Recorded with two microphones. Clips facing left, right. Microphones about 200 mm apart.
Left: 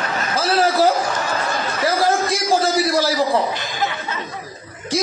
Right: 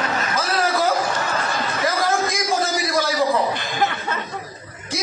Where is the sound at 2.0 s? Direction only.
30° left (ahead or behind).